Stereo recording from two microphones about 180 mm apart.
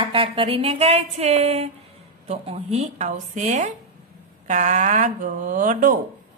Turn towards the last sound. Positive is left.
turn(degrees=-45)  # may be behind; listen again after turning